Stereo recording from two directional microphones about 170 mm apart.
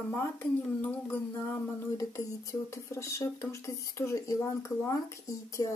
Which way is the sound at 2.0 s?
20° left (ahead or behind).